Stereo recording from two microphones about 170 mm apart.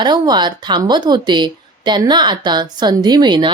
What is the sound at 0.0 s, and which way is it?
Speech, 25° right (ahead or behind).